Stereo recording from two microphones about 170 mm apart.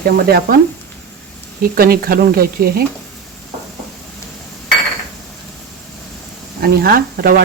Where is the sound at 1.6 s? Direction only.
60° right (ahead or behind).